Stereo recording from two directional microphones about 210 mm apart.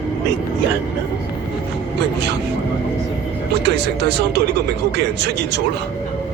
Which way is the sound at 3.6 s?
55° right (ahead or behind).